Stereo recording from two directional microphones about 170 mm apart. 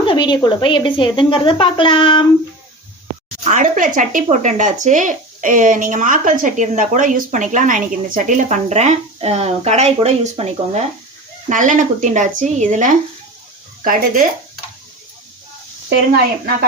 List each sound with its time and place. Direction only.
0.0 s speech: 30° left (ahead or behind)
3.4 s speech: 50° right (ahead or behind)